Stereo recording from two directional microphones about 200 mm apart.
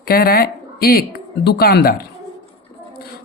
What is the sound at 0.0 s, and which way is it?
Speech, 50° left (ahead or behind).